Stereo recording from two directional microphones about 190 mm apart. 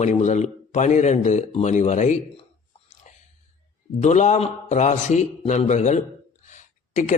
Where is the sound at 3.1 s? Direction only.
40° left (ahead or behind).